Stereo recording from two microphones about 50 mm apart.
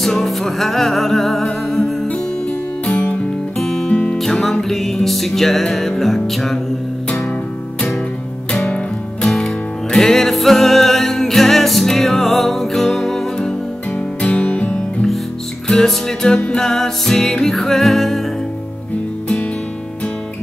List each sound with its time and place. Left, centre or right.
0.0 s music: centre
3.5 s music: centre
3.9 s music: left
4.2 s music: centre
8.6 s music: centre
9.8 s music: centre
14.4 s music: left
15.7 s music: centre